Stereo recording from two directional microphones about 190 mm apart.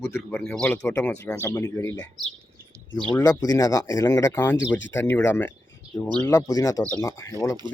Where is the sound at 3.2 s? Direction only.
20° left (ahead or behind).